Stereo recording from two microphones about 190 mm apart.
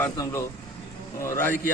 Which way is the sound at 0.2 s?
15° left (ahead or behind).